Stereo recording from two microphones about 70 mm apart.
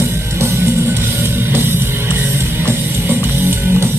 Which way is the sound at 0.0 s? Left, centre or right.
Right.